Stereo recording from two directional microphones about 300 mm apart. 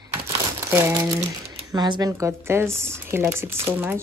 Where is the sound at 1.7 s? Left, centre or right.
Centre.